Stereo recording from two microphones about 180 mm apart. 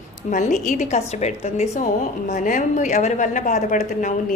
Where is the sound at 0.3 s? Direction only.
45° left (ahead or behind).